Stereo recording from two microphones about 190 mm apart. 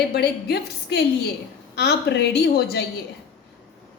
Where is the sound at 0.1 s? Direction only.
60° left (ahead or behind).